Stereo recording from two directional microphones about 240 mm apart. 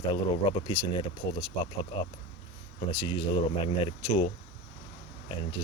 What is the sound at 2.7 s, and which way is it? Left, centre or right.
Speech, left.